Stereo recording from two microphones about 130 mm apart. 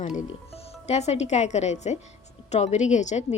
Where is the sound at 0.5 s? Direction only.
55° left (ahead or behind).